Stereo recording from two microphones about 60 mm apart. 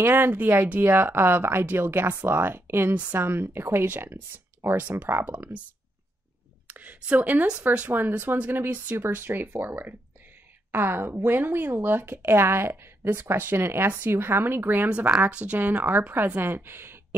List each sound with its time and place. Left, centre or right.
0.0 s speech: right
2.9 s a woman's voice: right
3.2 s speech: right
4.6 s speech: right
6.7 s a woman's voice: right
14.9 s speech: centre; by 17.0 s right